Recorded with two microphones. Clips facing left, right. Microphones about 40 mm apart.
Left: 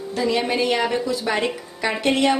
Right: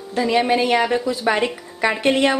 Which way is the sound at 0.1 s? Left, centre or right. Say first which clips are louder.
Right 4 dB; right.